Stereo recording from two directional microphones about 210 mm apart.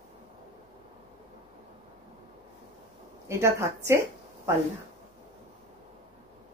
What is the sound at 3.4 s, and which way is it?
A woman's voice, 15° right (ahead or behind).